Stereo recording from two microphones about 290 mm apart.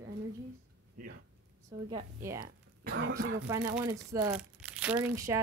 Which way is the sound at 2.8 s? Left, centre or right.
Right.